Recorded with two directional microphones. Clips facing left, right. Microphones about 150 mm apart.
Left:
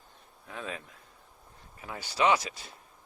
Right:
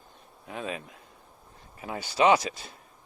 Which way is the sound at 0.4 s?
15° right (ahead or behind).